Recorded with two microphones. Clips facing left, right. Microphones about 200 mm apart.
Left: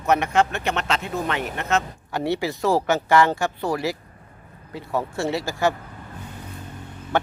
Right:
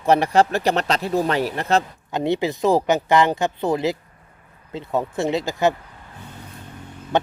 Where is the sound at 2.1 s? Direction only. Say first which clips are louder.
Right 3 dB; 20° right (ahead or behind).